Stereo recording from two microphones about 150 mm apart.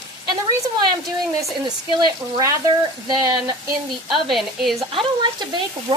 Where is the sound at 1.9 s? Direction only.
25° right (ahead or behind).